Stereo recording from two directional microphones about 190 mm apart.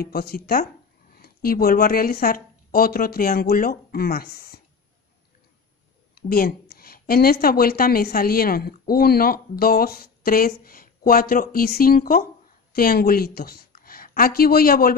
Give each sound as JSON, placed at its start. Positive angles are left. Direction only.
{"t": 0.0, "sound": "a woman's voice", "side_deg": 55}
{"t": 6.1, "sound": "a woman's voice", "side_deg": 50}